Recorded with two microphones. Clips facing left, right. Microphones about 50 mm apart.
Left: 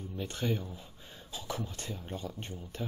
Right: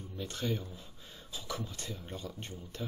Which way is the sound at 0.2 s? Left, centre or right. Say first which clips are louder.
Left 2 dB; left.